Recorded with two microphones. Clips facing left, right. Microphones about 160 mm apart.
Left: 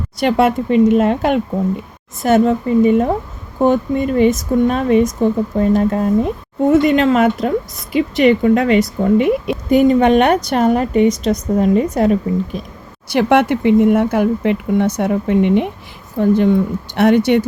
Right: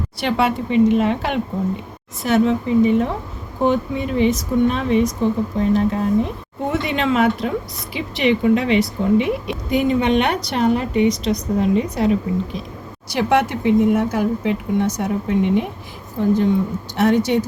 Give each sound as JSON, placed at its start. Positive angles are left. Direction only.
{"t": 0.2, "sound": "a woman's voice", "side_deg": 45}
{"t": 13.1, "sound": "speech", "side_deg": 60}